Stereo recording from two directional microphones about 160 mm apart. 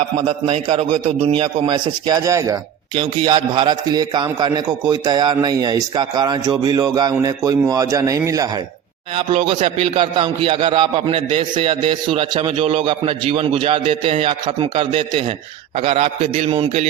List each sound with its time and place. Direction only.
0.4 s a man's voice: 35° right (ahead or behind); by 8.4 s 20° right (ahead or behind)
9.1 s a man's voice: 35° right (ahead or behind)